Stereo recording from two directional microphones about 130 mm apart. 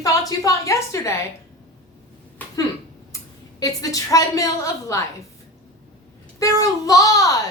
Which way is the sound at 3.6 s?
25° left (ahead or behind).